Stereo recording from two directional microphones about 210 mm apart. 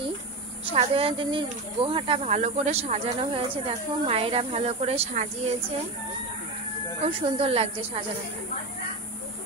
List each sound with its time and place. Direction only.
0.7 s speech: 25° right (ahead or behind)
7.2 s speech: 25° right (ahead or behind)